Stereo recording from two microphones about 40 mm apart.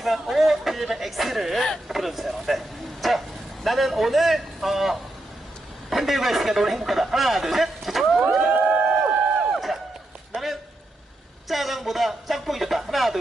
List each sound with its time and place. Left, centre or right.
0.0 s speech: centre
8.6 s a sound: right
9.5 s run: centre
11.4 s speech: centre